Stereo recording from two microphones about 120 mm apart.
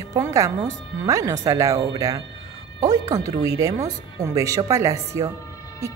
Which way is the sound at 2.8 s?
30° right (ahead or behind).